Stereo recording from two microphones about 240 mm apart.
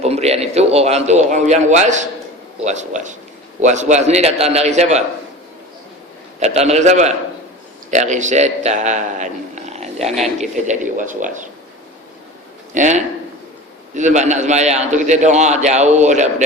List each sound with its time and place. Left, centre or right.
0.0 s speech: right
6.4 s speech: right
12.7 s a man's voice: right